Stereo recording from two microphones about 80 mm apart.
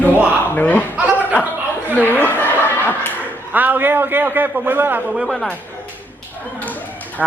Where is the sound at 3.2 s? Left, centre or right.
Right.